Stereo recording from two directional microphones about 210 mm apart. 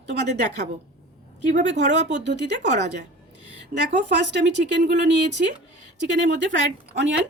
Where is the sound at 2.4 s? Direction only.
55° right (ahead or behind).